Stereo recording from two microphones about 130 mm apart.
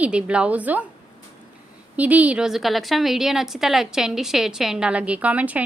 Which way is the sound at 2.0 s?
10° right (ahead or behind).